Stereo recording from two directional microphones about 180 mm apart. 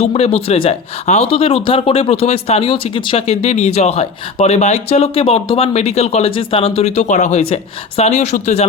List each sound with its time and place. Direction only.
0.0 s speech: 35° left (ahead or behind)